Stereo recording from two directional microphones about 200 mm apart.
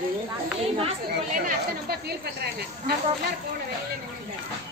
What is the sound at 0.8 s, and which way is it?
Speech, 40° right (ahead or behind).